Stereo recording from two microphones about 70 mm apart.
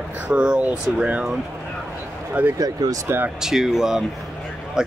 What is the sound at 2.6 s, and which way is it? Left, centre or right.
Speech, right.